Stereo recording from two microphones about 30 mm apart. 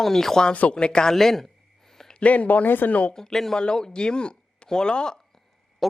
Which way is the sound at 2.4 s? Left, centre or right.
Left.